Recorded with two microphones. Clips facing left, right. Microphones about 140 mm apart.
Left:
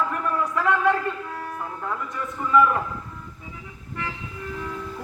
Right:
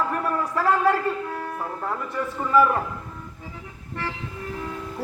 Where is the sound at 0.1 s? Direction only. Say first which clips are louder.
Even; 35° right (ahead or behind).